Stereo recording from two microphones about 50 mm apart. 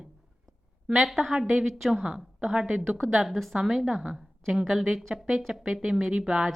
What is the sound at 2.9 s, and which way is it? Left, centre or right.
Speech, right.